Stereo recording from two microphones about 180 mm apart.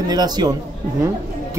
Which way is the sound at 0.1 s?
20° right (ahead or behind).